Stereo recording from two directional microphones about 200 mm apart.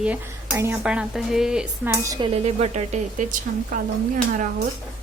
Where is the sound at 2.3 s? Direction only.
30° right (ahead or behind).